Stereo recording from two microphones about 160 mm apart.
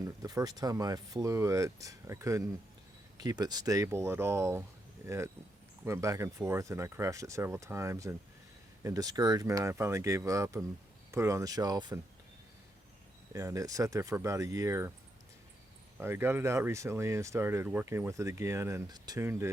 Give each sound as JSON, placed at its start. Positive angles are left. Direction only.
{"t": 0.2, "sound": "speech", "side_deg": -20}
{"t": 13.3, "sound": "speech", "side_deg": -20}
{"t": 16.0, "sound": "speech", "side_deg": -15}